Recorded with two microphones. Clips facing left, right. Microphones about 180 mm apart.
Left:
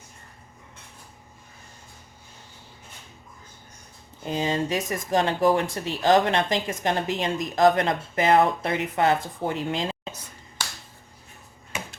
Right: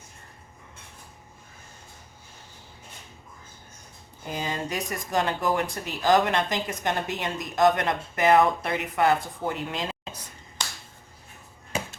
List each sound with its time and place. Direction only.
4.2 s speech: 25° left (ahead or behind)